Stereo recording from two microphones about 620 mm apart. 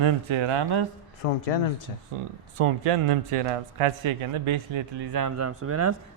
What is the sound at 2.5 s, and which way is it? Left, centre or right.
A man's voice, right.